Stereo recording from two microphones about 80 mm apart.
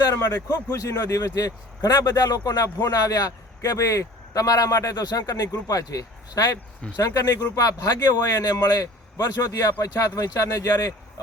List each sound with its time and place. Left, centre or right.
0.0 s speech: left